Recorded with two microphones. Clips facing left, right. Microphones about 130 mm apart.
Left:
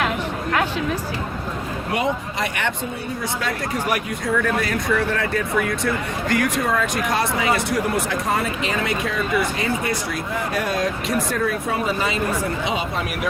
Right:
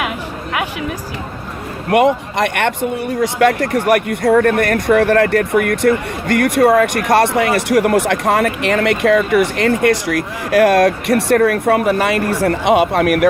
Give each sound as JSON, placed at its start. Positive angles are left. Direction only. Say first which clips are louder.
{"t": 1.9, "sound": "speech", "louder": "right 11 dB", "side_deg": -65}